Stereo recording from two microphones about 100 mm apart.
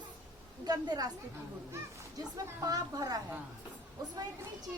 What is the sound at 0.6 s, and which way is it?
Speech, 40° right (ahead or behind).